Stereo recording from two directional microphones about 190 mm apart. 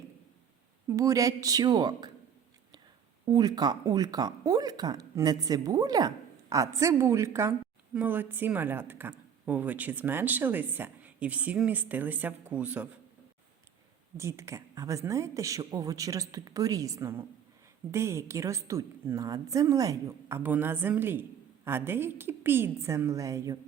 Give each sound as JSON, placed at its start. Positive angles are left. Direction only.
{"t": 0.9, "sound": "speech", "side_deg": -15}
{"t": 3.2, "sound": "a woman's voice", "side_deg": -20}
{"t": 14.2, "sound": "a woman's voice", "side_deg": -15}